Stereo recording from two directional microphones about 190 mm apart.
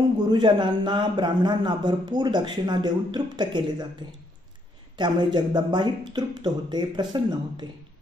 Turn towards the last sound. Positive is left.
turn(degrees=-25)  # may be behind; listen again after turning